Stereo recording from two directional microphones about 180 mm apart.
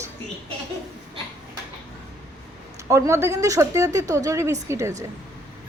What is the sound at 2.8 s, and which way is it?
Speech, 15° right (ahead or behind).